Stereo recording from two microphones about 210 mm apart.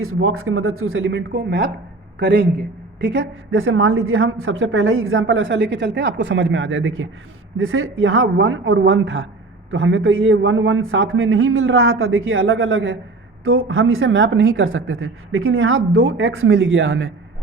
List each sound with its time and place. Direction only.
0.0 s a man's voice: 80° right; by 17.2 s 65° right (ahead or behind)